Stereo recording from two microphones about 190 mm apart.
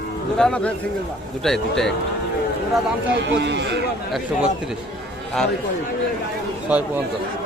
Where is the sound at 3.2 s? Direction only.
65° right (ahead or behind).